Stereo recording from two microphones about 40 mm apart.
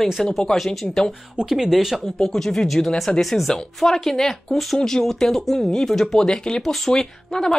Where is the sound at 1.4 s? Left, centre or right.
Centre.